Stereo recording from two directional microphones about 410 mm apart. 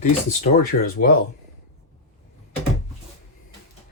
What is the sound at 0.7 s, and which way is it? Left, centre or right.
Speech, left.